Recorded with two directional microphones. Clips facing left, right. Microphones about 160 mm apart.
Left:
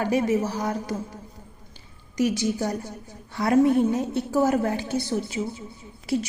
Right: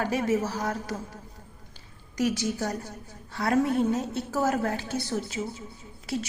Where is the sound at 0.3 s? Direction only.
15° left (ahead or behind).